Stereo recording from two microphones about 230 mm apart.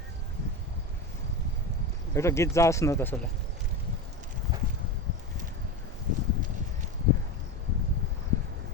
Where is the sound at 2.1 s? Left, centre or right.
Centre.